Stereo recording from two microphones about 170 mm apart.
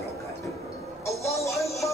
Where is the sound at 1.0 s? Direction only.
15° left (ahead or behind).